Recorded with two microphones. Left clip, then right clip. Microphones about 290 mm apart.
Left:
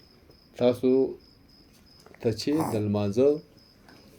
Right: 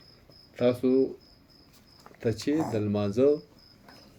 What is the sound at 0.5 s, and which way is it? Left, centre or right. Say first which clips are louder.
Speech: left 2 dB; left.